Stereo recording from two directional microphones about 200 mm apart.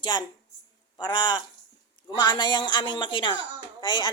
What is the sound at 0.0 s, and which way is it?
Speech, 20° left (ahead or behind).